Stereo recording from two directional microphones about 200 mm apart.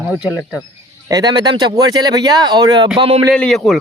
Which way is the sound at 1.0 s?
20° right (ahead or behind).